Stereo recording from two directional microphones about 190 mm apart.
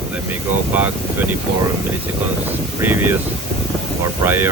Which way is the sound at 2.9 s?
10° right (ahead or behind).